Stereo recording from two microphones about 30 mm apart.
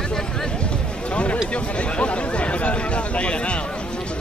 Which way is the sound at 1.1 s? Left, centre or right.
Left.